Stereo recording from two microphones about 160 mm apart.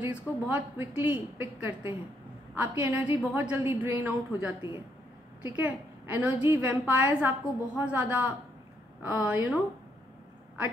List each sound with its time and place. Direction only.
0.0 s a woman's voice: 10° right (ahead or behind)
4.6 s speech: 30° left (ahead or behind)
5.6 s a woman's voice: 10° right (ahead or behind)